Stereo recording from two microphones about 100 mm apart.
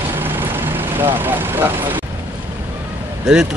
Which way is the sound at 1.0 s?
20° right (ahead or behind).